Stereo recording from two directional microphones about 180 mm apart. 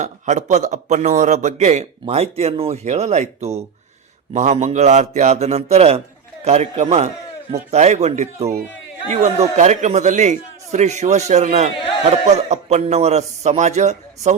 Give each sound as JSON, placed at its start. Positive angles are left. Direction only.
{"t": 0.0, "sound": "a man's voice", "side_deg": -40}